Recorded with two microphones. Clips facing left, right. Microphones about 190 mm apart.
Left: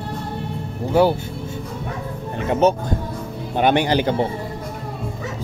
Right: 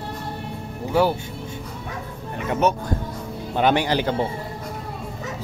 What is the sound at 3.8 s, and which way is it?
Speech, 15° left (ahead or behind).